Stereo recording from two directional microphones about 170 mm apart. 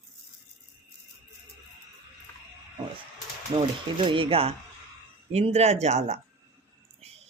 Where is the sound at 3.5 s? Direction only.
30° right (ahead or behind).